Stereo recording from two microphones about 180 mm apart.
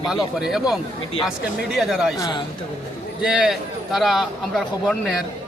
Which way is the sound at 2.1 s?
20° left (ahead or behind).